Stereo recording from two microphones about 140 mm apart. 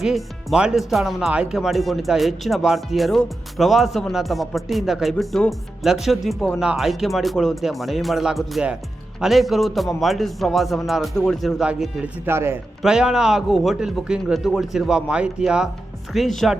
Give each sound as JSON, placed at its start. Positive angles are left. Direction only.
{"t": 0.0, "sound": "speech", "side_deg": -5}
{"t": 12.2, "sound": "a man's voice", "side_deg": -15}
{"t": 12.8, "sound": "speech", "side_deg": -5}